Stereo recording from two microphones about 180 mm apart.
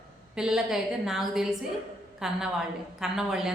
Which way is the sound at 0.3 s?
5° right (ahead or behind).